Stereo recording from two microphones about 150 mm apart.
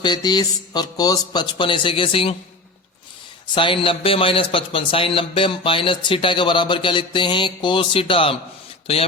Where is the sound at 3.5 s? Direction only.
35° left (ahead or behind).